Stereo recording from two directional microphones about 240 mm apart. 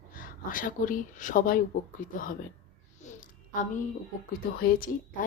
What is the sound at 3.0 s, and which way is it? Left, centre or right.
Music, left.